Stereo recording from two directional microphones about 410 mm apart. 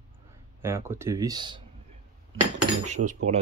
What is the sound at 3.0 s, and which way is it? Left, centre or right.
Speech, right.